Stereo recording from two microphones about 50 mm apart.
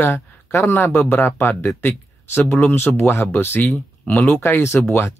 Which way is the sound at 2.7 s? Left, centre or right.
Left.